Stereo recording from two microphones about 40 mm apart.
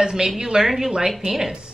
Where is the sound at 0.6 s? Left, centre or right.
Centre.